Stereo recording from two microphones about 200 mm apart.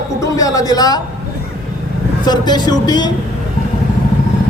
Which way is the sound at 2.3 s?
20° left (ahead or behind).